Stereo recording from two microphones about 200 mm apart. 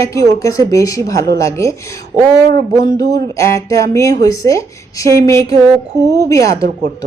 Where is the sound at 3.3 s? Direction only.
15° left (ahead or behind).